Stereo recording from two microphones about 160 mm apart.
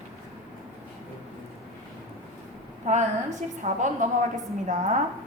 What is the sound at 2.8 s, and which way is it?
A woman's voice, 45° right (ahead or behind).